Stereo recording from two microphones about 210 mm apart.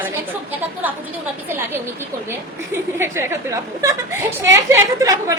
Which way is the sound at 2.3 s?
10° right (ahead or behind).